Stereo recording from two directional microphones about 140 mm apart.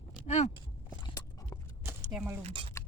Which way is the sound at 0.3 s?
55° left (ahead or behind).